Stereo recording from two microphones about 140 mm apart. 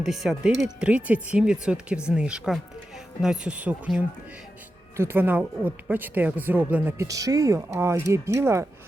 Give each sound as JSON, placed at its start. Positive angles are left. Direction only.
{"t": 0.0, "sound": "speech", "side_deg": -5}